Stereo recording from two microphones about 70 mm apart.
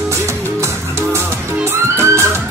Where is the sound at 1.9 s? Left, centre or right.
Right.